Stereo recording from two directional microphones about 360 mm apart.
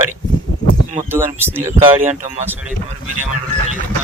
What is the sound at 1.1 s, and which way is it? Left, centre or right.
Speech, centre.